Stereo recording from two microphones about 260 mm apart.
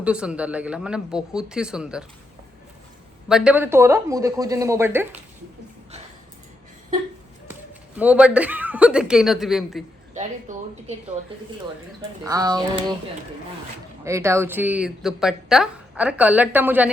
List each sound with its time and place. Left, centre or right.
0.0 s speech: centre
3.2 s speech: centre
7.9 s speech: centre
10.5 s a woman's voice: right
12.2 s speech: centre
14.0 s speech: centre